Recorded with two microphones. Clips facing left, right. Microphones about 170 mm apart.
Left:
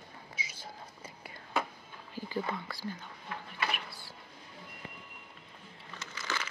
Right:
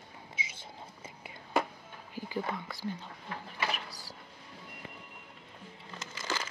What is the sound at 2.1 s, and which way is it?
Whispering, 15° right (ahead or behind).